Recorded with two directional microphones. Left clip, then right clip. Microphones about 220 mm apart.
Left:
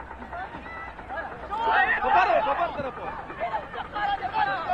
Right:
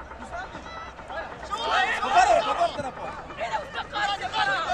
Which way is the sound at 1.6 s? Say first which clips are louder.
Left 2 dB; 45° right (ahead or behind).